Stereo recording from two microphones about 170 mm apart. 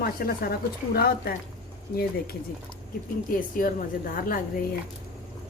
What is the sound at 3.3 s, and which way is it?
A woman's voice, 55° left (ahead or behind).